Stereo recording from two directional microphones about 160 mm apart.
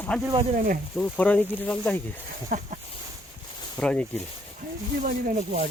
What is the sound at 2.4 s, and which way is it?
Speech, 50° right (ahead or behind).